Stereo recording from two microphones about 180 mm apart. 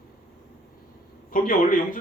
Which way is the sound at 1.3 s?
50° left (ahead or behind).